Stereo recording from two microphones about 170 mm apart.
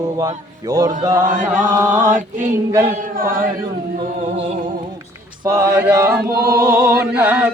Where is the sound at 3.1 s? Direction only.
55° right (ahead or behind).